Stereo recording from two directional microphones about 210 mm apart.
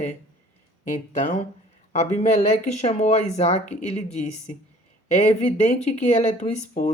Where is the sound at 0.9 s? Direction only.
35° left (ahead or behind).